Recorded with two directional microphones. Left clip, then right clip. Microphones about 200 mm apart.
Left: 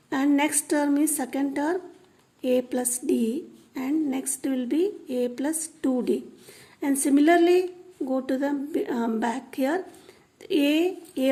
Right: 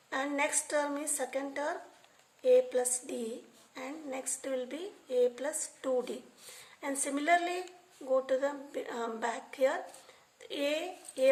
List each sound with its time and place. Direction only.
0.1 s a woman's voice: 40° left (ahead or behind)